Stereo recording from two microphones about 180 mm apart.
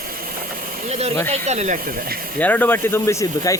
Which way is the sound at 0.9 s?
35° right (ahead or behind).